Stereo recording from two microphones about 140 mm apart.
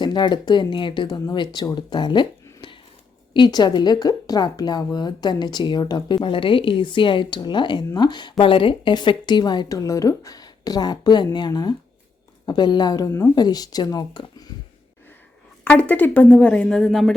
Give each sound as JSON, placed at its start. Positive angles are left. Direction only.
{"t": 0.0, "sound": "a woman's voice", "side_deg": 30}
{"t": 15.6, "sound": "a woman's voice", "side_deg": 10}